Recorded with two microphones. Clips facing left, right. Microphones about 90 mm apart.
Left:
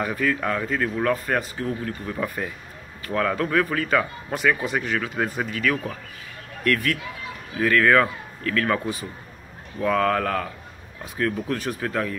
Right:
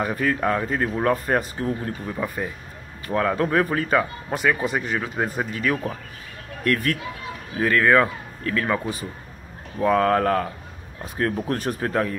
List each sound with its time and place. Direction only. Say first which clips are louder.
0.0 s speech: right 2 dB; 30° right (ahead or behind)
2.2 s speech: even; 15° right (ahead or behind)
6.6 s speech: even; 35° right (ahead or behind)
9.8 s speech: right 3 dB; 30° right (ahead or behind)